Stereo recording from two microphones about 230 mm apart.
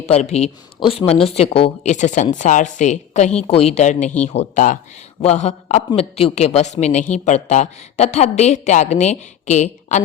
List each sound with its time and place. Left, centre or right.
0.0 s a man's voice: left